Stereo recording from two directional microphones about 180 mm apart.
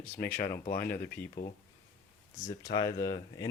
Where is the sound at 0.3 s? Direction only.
50° left (ahead or behind).